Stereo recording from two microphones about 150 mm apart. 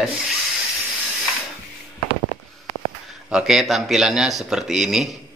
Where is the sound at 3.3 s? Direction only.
5° right (ahead or behind).